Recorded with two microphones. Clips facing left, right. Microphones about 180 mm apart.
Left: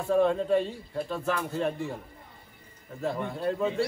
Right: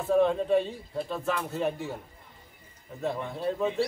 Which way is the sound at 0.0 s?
Centre (ahead or behind).